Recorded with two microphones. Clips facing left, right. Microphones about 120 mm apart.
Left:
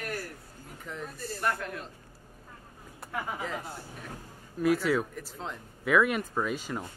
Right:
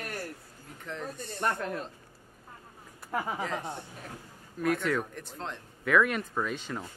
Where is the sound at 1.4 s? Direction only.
40° right (ahead or behind).